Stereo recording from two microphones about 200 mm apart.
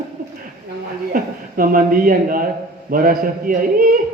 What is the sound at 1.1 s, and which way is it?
A man's voice, 45° right (ahead or behind).